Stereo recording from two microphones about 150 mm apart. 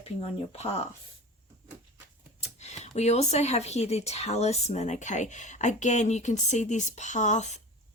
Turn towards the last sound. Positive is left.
turn(degrees=50)  # may be behind; listen again after turning